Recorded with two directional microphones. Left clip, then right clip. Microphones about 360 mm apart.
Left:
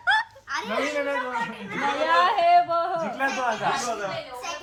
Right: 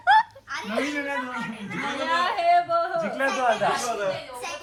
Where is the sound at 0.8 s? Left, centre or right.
Centre.